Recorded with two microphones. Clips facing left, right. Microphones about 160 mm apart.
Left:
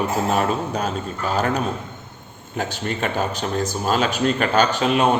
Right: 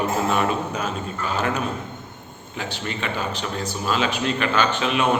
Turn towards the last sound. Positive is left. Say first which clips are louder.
# left 3 dB
turn(degrees=40)  # may be behind; listen again after turning